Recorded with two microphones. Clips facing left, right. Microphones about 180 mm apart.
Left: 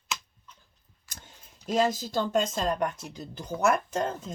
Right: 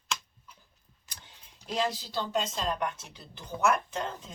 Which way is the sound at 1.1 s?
45° left (ahead or behind).